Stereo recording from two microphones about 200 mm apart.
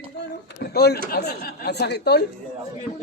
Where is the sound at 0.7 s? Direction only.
55° left (ahead or behind).